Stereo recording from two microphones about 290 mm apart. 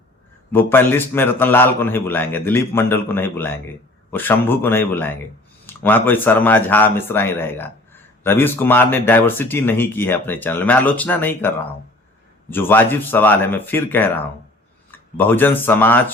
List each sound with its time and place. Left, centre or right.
0.5 s speech: centre